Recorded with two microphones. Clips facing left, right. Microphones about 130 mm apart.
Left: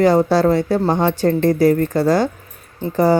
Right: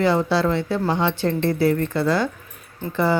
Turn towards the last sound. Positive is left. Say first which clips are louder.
# left 6 dB
turn(degrees=40)  # may be behind; listen again after turning